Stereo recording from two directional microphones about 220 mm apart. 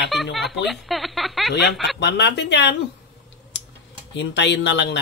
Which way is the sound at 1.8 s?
50° left (ahead or behind).